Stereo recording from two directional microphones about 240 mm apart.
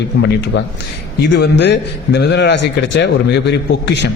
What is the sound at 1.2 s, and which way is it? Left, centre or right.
A man's voice, left.